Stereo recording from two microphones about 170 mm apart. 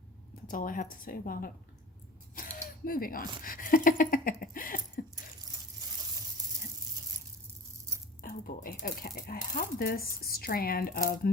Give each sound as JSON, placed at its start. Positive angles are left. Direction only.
{"t": 0.4, "sound": "speech", "side_deg": 55}
{"t": 6.4, "sound": "a sound", "side_deg": -20}
{"t": 8.2, "sound": "speech", "side_deg": 55}